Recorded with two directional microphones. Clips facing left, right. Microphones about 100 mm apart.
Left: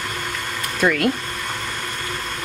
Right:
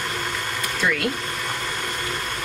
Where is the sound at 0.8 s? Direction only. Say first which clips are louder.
Left 5 dB; 50° left (ahead or behind).